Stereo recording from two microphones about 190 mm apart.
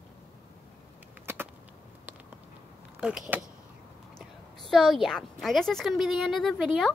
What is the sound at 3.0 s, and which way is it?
Speech, 5° right (ahead or behind).